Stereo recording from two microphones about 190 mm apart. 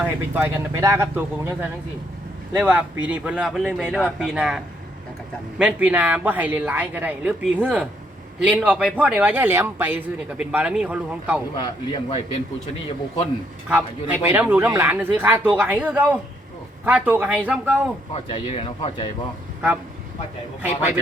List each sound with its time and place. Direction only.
0.0 s a man's voice: 10° right (ahead or behind)
2.6 s a man's voice: 5° right (ahead or behind)
11.5 s speech: 25° left (ahead or behind)
13.7 s a man's voice: 10° right (ahead or behind)
18.1 s speech: 30° left (ahead or behind)
20.6 s a man's voice: 10° right (ahead or behind)